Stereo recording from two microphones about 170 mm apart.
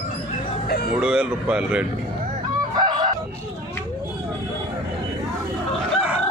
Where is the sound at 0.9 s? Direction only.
5° right (ahead or behind).